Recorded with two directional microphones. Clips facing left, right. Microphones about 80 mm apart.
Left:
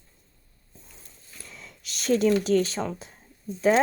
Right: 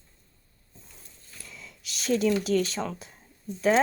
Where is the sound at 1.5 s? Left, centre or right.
Left.